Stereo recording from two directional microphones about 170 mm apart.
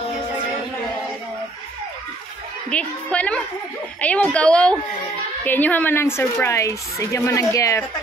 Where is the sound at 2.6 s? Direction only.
5° left (ahead or behind).